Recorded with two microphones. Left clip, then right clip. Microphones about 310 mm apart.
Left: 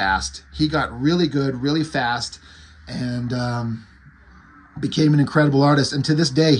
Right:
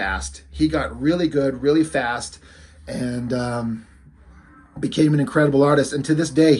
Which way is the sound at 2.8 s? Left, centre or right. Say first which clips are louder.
Right 2 dB; centre.